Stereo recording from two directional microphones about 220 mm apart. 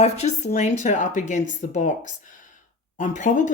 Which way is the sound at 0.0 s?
30° left (ahead or behind).